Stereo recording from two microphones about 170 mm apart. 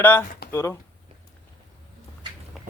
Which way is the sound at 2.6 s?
Centre (ahead or behind).